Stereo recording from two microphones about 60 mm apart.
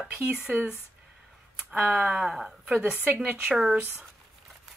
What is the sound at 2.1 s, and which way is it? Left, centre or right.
Speech, centre.